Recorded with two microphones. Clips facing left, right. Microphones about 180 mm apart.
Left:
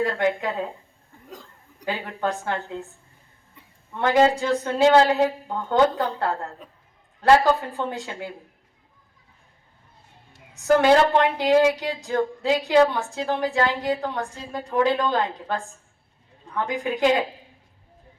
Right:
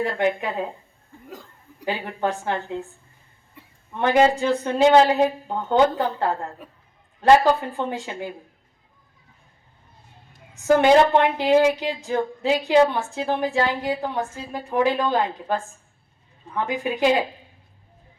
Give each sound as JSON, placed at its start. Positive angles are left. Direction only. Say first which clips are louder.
{"t": 0.0, "sound": "a woman's voice", "louder": "even", "side_deg": -15}
{"t": 1.8, "sound": "speech", "louder": "right 2 dB", "side_deg": -20}
{"t": 3.9, "sound": "a woman's voice", "louder": "right 1 dB", "side_deg": -15}
{"t": 10.6, "sound": "a woman's voice", "louder": "right 1 dB", "side_deg": -20}
{"t": 13.7, "sound": "a woman's voice", "louder": "left 1 dB", "side_deg": 20}
{"t": 14.5, "sound": "a woman's voice", "louder": "even", "side_deg": -15}
{"t": 16.8, "sound": "a woman's voice", "louder": "even", "side_deg": -15}